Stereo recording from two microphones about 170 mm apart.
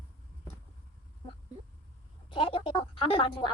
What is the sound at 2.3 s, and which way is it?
Speech, 30° left (ahead or behind).